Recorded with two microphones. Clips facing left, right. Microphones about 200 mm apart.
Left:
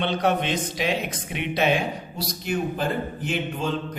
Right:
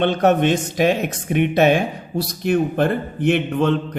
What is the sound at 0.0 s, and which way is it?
A man's voice, 50° right (ahead or behind).